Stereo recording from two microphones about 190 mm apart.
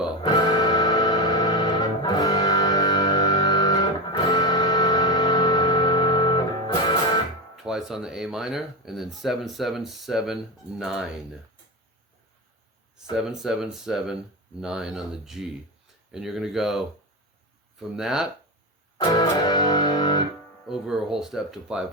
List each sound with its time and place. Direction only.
0.2 s music: 20° left (ahead or behind)
7.5 s speech: centre (ahead or behind)
13.1 s speech: centre (ahead or behind)
18.9 s music: 20° left (ahead or behind)
20.7 s speech: centre (ahead or behind)